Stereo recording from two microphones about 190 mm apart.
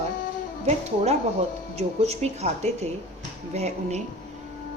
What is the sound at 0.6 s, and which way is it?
A woman's voice, 35° right (ahead or behind).